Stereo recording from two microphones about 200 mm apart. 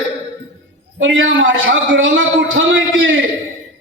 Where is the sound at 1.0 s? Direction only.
70° right (ahead or behind).